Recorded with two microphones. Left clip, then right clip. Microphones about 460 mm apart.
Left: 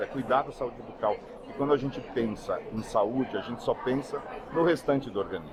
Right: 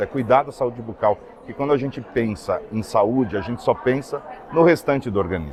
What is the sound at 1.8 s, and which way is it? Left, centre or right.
Speech, right.